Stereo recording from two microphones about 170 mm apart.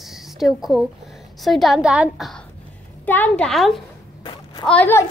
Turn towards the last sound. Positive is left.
turn(degrees=10)  # may be behind; listen again after turning